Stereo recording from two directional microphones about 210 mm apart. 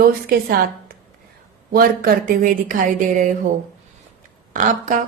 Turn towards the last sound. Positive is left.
turn(degrees=-40)  # may be behind; listen again after turning